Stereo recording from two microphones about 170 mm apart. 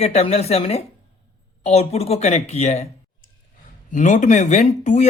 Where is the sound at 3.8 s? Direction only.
45° left (ahead or behind).